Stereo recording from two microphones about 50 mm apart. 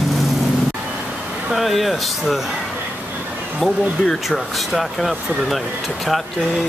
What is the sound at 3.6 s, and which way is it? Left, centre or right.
Speech, centre.